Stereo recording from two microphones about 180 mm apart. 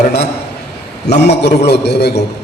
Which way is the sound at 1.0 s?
70° left (ahead or behind).